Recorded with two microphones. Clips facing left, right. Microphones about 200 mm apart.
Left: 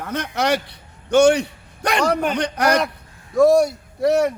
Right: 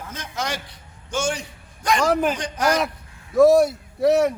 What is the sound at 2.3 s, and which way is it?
Speech, 65° left (ahead or behind).